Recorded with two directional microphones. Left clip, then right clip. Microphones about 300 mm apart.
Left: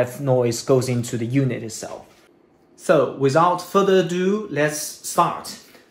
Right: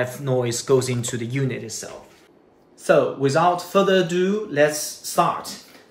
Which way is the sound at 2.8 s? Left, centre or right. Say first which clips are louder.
Even; left.